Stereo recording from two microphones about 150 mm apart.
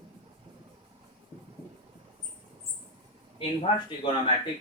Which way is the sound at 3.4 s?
40° left (ahead or behind).